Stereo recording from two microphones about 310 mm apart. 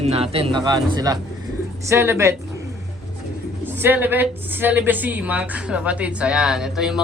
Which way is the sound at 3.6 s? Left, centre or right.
Centre.